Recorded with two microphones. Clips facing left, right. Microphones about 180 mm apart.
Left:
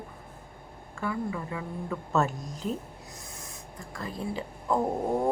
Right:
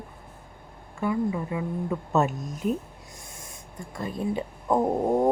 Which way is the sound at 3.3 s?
25° right (ahead or behind).